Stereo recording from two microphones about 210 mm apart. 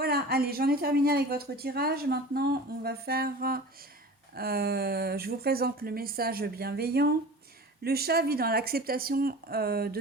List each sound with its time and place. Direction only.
0.0 s a woman's voice: 45° right (ahead or behind)